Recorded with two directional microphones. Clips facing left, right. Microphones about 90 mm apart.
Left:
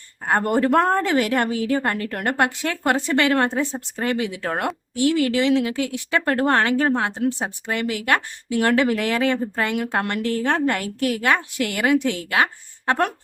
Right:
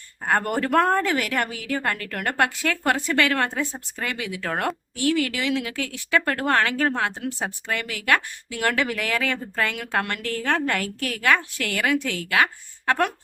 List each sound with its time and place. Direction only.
0.3 s a woman's voice: 25° left (ahead or behind)